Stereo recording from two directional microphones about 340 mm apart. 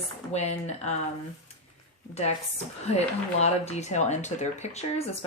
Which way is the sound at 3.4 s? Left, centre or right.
Centre.